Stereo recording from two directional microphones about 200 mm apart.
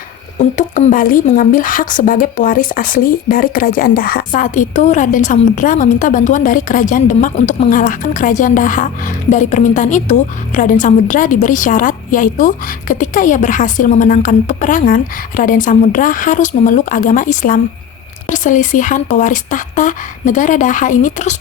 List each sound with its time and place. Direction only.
0.3 s a woman's voice: 40° left (ahead or behind)